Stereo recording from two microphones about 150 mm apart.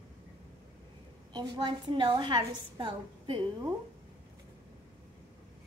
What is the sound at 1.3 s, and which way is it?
A woman's voice, 30° right (ahead or behind).